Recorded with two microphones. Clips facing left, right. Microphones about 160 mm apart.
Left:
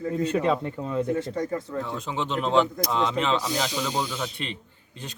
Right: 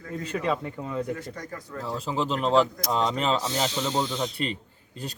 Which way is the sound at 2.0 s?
35° right (ahead or behind).